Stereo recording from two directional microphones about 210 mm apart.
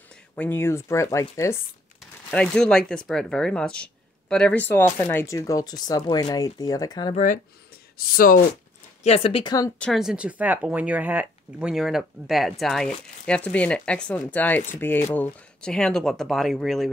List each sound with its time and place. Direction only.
0.4 s speech: 10° left (ahead or behind)
8.1 s speech: 45° left (ahead or behind)
9.0 s speech: 25° left (ahead or behind)
9.8 s speech: centre (ahead or behind)